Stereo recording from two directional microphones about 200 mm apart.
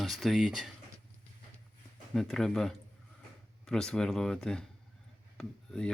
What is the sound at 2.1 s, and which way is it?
Speech, centre (ahead or behind).